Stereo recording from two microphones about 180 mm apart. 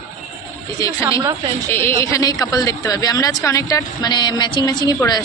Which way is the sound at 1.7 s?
15° left (ahead or behind).